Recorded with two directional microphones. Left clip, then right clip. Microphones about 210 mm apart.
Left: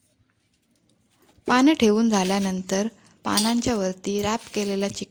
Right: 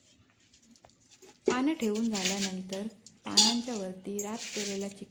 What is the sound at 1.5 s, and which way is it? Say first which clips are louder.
A woman's voice: left 11 dB; 50° left (ahead or behind).